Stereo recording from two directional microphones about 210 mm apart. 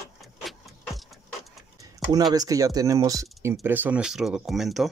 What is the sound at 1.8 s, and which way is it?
Speech, 20° right (ahead or behind).